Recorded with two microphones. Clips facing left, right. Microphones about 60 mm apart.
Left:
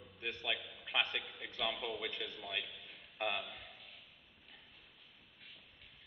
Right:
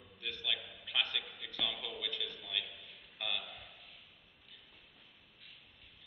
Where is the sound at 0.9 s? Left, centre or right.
Left.